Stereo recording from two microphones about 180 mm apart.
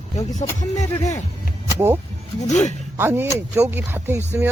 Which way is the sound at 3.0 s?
10° right (ahead or behind).